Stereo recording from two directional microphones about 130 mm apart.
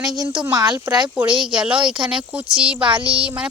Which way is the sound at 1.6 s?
5° right (ahead or behind).